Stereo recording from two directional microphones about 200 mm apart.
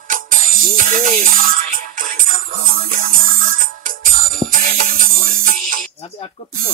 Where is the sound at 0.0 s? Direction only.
40° right (ahead or behind).